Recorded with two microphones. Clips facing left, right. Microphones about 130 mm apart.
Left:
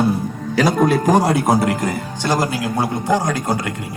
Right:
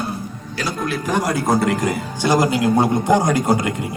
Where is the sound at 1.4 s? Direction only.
10° left (ahead or behind).